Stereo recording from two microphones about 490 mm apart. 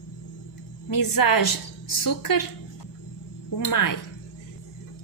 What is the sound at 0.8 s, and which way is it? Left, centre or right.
A woman's voice, left.